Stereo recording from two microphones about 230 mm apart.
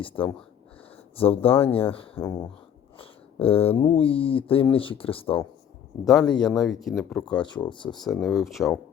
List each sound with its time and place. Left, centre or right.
0.0 s speech: left
6.1 s speech: centre
7.4 s speech: centre
7.9 s speech: centre